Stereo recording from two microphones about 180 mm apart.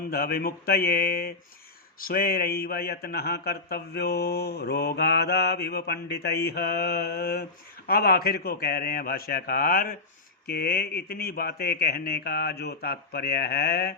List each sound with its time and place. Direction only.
0.1 s speech: 60° left (ahead or behind)